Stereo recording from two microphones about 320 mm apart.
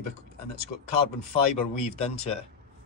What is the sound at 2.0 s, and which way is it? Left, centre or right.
Speech, centre.